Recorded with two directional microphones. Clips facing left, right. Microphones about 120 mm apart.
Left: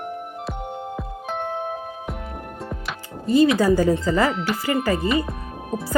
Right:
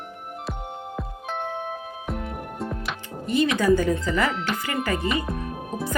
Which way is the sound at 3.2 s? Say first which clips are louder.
Left 6 dB; 35° left (ahead or behind).